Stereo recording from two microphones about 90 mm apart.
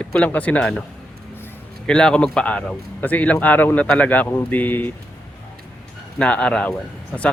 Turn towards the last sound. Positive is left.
turn(degrees=15)  # may be behind; listen again after turning